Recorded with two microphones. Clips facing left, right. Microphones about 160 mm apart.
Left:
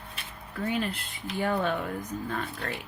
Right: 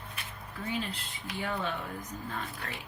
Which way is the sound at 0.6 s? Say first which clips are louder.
Left 6 dB; 60° left (ahead or behind).